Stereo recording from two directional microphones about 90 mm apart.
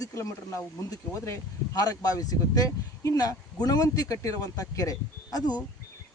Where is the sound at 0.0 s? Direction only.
35° left (ahead or behind).